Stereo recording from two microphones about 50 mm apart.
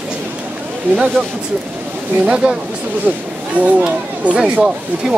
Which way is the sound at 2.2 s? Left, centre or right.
Right.